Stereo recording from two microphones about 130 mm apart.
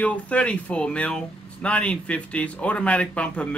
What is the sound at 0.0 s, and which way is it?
Speech, 10° left (ahead or behind).